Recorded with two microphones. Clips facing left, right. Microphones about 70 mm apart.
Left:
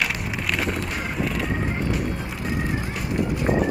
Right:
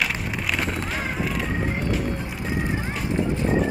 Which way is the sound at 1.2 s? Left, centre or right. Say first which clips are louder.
Left 3 dB; centre.